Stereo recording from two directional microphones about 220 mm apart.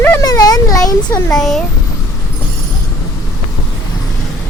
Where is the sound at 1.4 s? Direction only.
Centre (ahead or behind).